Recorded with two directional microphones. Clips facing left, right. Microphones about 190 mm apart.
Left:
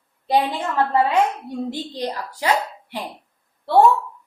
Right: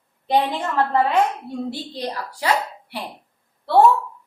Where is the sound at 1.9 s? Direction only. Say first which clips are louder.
Left 1 dB; 15° left (ahead or behind).